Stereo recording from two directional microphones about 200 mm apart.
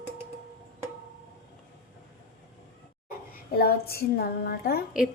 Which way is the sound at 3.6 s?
50° left (ahead or behind).